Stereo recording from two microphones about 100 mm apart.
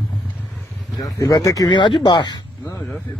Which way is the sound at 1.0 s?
35° left (ahead or behind).